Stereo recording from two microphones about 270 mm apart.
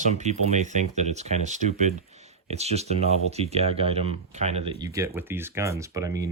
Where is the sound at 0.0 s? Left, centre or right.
Right.